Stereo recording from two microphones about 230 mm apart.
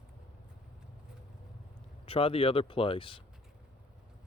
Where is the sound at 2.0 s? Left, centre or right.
Left.